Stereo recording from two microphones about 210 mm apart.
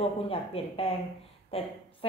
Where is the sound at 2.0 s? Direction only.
25° left (ahead or behind).